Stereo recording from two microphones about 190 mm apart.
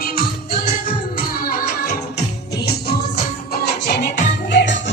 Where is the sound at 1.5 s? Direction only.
50° left (ahead or behind).